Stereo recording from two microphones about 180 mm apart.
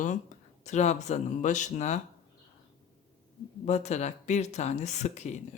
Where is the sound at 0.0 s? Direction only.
45° left (ahead or behind).